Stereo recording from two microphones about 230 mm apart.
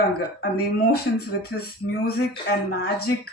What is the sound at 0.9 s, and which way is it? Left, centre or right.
Speech, left.